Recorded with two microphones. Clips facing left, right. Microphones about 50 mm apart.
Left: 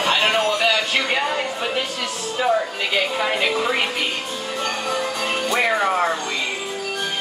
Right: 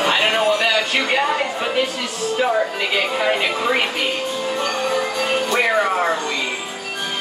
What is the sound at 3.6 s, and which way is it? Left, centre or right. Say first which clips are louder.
Music: right 2 dB; centre.